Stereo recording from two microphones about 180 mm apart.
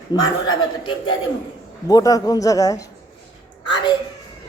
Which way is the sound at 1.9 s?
20° left (ahead or behind).